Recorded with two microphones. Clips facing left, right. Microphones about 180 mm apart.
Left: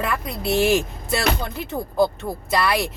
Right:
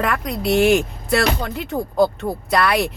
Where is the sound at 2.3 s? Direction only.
25° right (ahead or behind).